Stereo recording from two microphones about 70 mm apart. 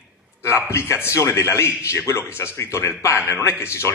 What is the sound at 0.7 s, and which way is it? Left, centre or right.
A man's voice, left.